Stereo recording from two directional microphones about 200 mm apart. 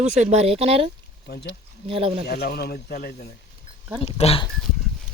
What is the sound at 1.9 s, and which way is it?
Speech, 30° right (ahead or behind).